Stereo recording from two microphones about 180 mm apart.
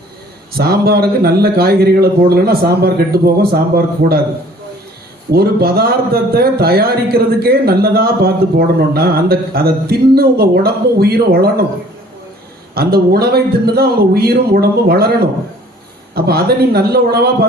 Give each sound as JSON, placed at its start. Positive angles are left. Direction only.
{"t": 0.5, "sound": "a man's voice", "side_deg": -60}
{"t": 5.3, "sound": "a man's voice", "side_deg": -60}
{"t": 12.7, "sound": "a man's voice", "side_deg": -60}